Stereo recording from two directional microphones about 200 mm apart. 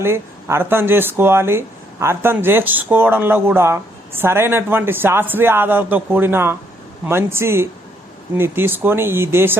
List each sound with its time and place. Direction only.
0.0 s speech: 15° right (ahead or behind)